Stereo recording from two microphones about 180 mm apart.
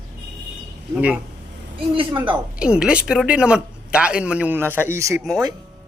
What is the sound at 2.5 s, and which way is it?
Speech, 5° right (ahead or behind).